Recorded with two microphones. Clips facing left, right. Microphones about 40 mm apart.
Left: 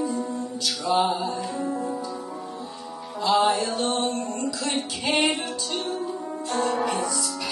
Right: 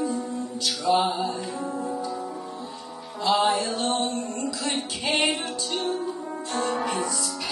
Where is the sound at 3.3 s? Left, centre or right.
Centre.